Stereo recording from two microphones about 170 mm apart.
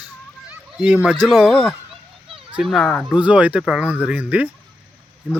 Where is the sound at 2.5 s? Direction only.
Centre (ahead or behind).